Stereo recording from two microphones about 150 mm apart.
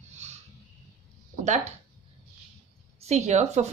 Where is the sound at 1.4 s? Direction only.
50° right (ahead or behind).